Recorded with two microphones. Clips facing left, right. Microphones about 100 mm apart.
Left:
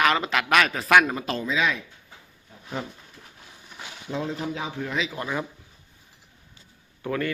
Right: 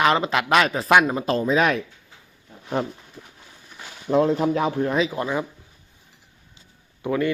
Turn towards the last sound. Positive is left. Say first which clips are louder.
# right 5 dB
turn(degrees=-15)  # may be behind; listen again after turning